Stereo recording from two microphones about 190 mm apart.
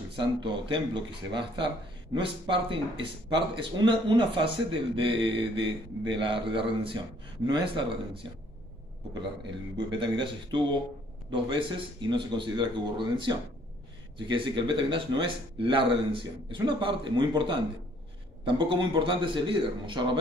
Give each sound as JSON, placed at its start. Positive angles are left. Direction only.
{"t": 0.1, "sound": "speech", "side_deg": -25}
{"t": 9.8, "sound": "speech", "side_deg": -25}